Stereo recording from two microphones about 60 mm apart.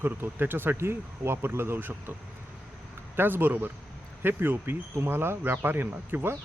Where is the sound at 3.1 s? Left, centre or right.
Right.